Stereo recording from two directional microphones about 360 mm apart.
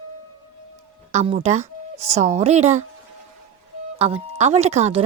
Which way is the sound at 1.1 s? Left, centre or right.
Centre.